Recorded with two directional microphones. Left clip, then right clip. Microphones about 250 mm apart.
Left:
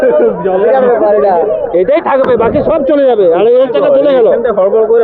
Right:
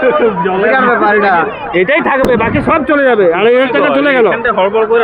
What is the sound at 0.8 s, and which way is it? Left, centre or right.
Speech, centre.